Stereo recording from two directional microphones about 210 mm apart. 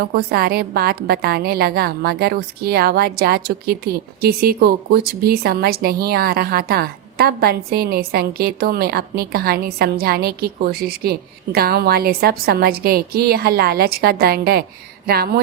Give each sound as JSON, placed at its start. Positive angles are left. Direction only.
{"t": 0.0, "sound": "a woman's voice", "side_deg": -45}